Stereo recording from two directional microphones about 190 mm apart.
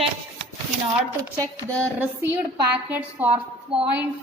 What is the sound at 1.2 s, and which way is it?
A woman's voice, 15° right (ahead or behind).